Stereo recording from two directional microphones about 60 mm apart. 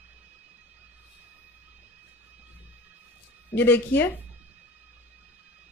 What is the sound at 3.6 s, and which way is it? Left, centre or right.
Speech, left.